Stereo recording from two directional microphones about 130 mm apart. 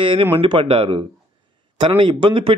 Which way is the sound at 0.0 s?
40° right (ahead or behind).